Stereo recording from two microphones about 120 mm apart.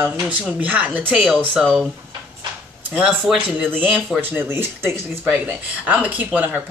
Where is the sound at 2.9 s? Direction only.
10° right (ahead or behind).